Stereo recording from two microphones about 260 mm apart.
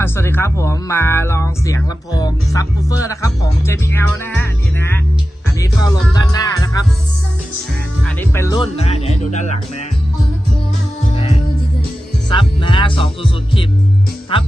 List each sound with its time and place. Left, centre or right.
0.0 s speech: centre
5.5 s speech: centre
8.0 s speech: centre
8.7 s music: left
11.1 s music: left